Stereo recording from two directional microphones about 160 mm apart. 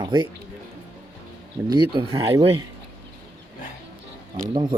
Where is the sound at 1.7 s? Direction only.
25° right (ahead or behind).